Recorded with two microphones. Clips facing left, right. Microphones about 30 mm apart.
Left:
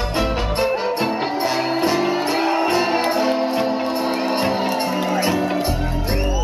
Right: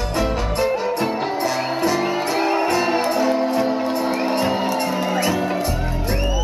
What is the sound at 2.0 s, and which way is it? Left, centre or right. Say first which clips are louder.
Music: left 1 dB; centre.